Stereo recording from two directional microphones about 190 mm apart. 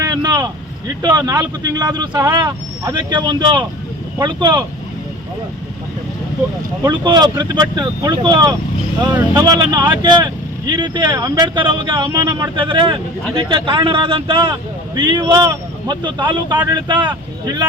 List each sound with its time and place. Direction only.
0.0 s vehicle: 20° right (ahead or behind)
1.0 s speech: 20° right (ahead or behind)
6.8 s speech: 25° right (ahead or behind)